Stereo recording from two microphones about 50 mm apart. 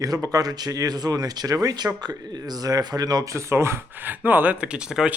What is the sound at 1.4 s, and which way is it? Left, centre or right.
Speech, right.